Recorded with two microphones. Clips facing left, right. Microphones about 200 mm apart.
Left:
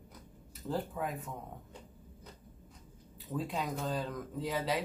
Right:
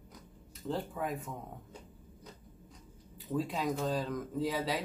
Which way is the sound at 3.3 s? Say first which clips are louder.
Right 3 dB; centre (ahead or behind).